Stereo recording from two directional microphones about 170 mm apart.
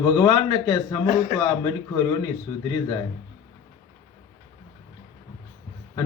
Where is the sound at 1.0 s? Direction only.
45° left (ahead or behind).